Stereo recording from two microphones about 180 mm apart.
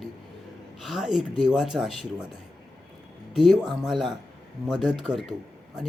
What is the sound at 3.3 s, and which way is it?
Speech, centre (ahead or behind).